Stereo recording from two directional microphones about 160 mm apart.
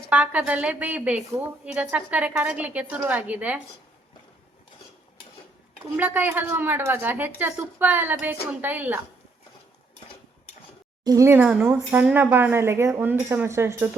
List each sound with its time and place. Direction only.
0.1 s a woman's voice: 10° right (ahead or behind)
6.0 s a woman's voice: 10° right (ahead or behind)
11.0 s a woman's voice: 20° right (ahead or behind)